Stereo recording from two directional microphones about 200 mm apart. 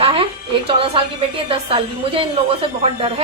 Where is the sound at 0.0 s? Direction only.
25° right (ahead or behind).